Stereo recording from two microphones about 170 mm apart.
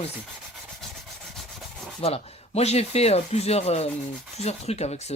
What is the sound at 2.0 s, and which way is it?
Rub, 35° left (ahead or behind).